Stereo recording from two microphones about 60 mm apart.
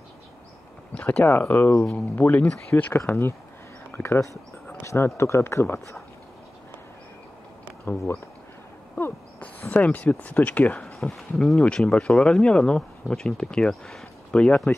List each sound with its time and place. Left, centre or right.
0.9 s a sound: left
1.2 s speech: left
1.8 s speech: centre
2.1 s speech: left
9.4 s speech: left
10.6 s speech: centre
11.6 s speech: centre
14.3 s speech: centre